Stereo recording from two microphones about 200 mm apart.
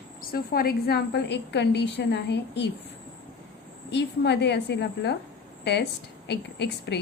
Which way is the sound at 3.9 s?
60° left (ahead or behind).